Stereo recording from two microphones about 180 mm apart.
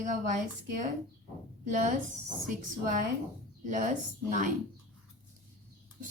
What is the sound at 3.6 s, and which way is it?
Speech, 45° right (ahead or behind).